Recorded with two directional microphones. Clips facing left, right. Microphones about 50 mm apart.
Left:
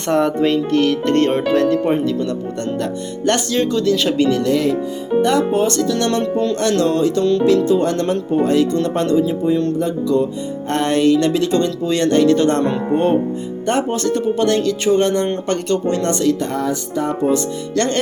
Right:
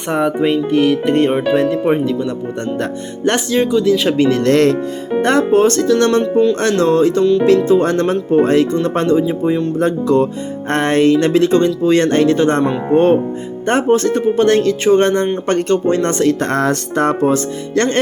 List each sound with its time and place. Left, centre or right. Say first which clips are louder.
0.1 s speech: even; centre
2.7 s music: right 1 dB; right
3.7 s speech: right 3 dB; centre
4.4 s speech: right 5 dB; right
5.2 s speech: right 5 dB; right; by 6.6 s centre
6.6 s music: right 3 dB; right
7.4 s speech: right 3 dB; right
8.7 s music: right 2 dB; right
9.7 s music: right 4 dB; right
10.7 s speech: right 2 dB; right
12.9 s music: right 6 dB; right
13.7 s speech: right 5 dB; right
16.4 s speech: right 4 dB; right
17.7 s music: right 3 dB; right